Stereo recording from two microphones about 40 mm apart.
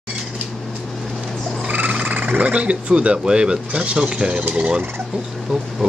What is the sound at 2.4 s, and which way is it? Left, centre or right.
Speech, right.